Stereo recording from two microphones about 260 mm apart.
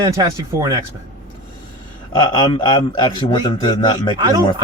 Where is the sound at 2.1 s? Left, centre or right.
Centre.